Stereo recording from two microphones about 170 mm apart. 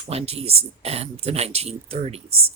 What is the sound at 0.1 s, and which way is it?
A woman's voice, 35° right (ahead or behind).